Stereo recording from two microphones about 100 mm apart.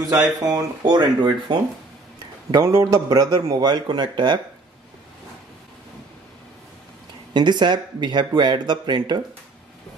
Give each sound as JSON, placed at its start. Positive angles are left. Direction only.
{"t": 0.2, "sound": "speech", "side_deg": -40}
{"t": 2.5, "sound": "a man's voice", "side_deg": -30}
{"t": 7.3, "sound": "speech", "side_deg": -50}